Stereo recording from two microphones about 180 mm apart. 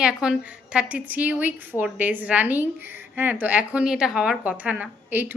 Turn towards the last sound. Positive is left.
turn(degrees=-10)  # may be behind; listen again after turning